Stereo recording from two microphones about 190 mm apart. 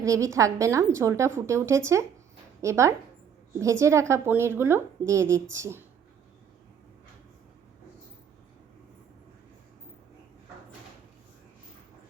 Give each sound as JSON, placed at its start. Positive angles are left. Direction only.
{"t": 0.0, "sound": "a woman's voice", "side_deg": -15}